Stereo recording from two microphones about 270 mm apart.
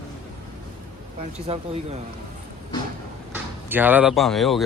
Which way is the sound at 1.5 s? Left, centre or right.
Right.